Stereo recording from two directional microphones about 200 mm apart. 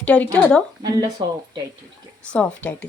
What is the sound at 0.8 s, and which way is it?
Speech, 20° right (ahead or behind).